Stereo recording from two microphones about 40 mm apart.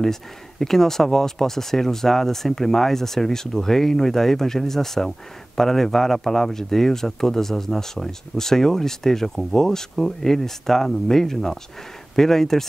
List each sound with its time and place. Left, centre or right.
0.0 s speech: centre